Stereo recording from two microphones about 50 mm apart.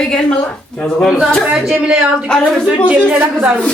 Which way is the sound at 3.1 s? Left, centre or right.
Right.